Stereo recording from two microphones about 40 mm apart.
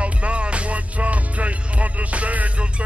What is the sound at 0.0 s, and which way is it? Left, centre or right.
Music, right.